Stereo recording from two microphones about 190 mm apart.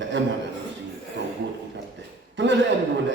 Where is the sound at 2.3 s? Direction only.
70° right (ahead or behind).